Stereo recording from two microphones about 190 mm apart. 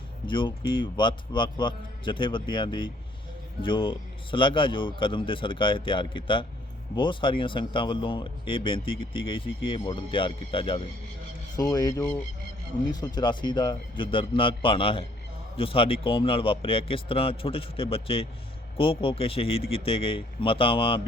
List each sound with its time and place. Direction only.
0.3 s speech: 25° left (ahead or behind)